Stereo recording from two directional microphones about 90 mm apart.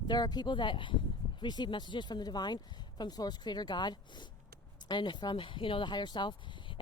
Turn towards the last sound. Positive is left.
turn(degrees=55)  # may be behind; listen again after turning